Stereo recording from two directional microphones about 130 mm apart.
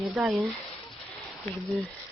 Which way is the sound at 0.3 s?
5° right (ahead or behind).